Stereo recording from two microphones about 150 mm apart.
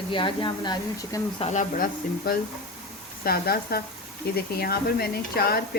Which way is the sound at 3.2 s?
90° left.